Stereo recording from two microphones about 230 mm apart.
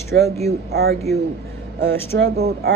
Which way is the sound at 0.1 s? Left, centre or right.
Right.